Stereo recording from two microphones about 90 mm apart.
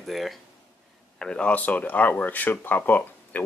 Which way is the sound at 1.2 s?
10° left (ahead or behind).